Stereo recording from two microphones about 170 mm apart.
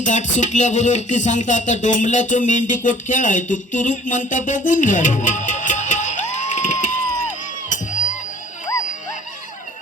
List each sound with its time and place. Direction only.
0.0 s music: 45° left (ahead or behind)